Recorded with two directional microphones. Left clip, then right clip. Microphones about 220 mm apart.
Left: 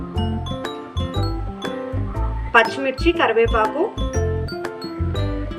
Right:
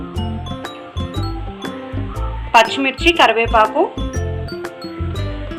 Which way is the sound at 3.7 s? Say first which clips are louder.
Right 4 dB; centre (ahead or behind).